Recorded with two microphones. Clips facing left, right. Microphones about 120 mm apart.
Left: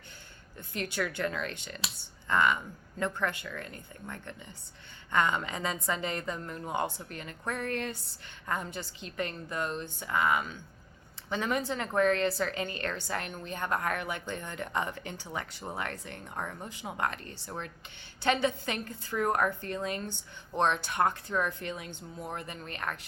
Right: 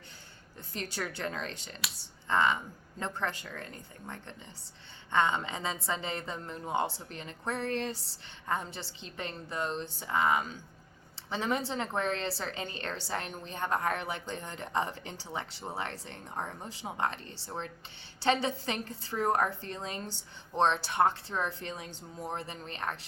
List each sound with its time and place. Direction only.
0.7 s a woman's voice: 35° right (ahead or behind)